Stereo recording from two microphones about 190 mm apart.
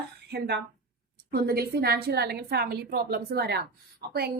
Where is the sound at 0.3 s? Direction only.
60° right (ahead or behind).